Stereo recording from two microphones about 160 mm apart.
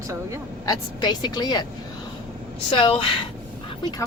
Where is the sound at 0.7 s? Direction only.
25° left (ahead or behind).